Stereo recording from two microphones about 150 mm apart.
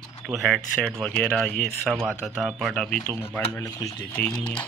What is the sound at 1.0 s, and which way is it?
Speech, 10° left (ahead or behind).